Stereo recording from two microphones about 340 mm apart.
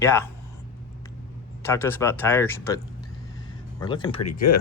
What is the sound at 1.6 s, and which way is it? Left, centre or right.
Speech, centre.